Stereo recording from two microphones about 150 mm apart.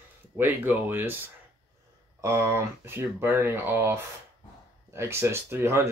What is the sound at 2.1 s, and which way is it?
Speech, 20° right (ahead or behind).